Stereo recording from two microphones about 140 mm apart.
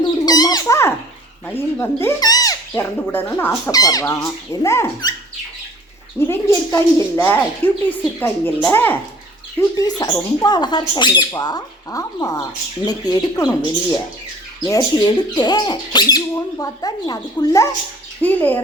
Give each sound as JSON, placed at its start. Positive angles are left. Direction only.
{"t": 0.3, "sound": "bird", "side_deg": 25}
{"t": 1.5, "sound": "a woman's voice", "side_deg": 15}
{"t": 3.7, "sound": "speech", "side_deg": 25}
{"t": 6.1, "sound": "a woman's voice", "side_deg": 20}
{"t": 9.6, "sound": "speech", "side_deg": 25}
{"t": 14.6, "sound": "speech", "side_deg": 25}
{"t": 18.2, "sound": "a woman's voice", "side_deg": 15}